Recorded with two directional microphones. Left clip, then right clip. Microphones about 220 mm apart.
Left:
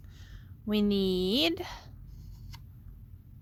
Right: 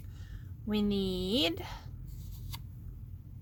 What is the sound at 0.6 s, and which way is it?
Speech, 45° left (ahead or behind).